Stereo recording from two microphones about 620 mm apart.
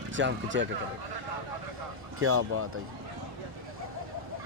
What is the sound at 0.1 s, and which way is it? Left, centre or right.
Speech, centre.